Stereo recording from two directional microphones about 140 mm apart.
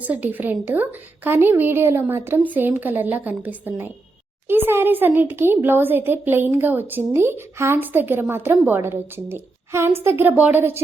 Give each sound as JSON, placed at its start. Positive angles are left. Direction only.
{"t": 0.0, "sound": "a child's voice", "side_deg": -10}